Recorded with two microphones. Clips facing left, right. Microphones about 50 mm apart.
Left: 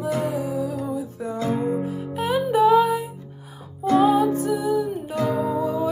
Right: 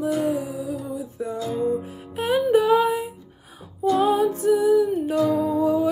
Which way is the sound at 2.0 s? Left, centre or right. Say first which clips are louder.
Right 1 dB; right.